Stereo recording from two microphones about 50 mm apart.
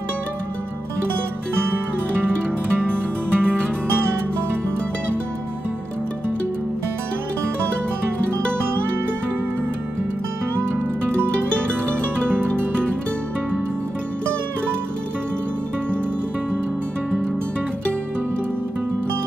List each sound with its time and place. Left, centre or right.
1.6 s music: right
2.9 s music: centre
12.2 s music: right